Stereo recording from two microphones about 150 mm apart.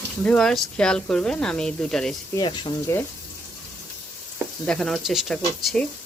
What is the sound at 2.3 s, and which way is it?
Speech, 20° left (ahead or behind).